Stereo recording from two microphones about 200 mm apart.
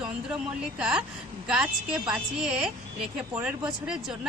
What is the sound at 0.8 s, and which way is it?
Speech, 5° right (ahead or behind).